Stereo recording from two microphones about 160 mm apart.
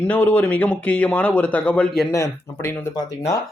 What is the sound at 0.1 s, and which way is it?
Speech, 10° left (ahead or behind).